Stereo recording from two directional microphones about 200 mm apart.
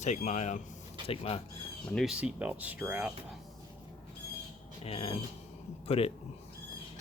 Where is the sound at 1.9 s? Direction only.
Centre (ahead or behind).